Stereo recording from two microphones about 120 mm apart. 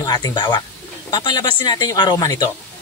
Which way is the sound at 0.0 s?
30° left (ahead or behind).